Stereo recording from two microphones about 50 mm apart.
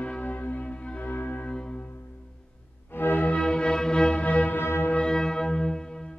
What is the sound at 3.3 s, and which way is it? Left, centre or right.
Music, centre.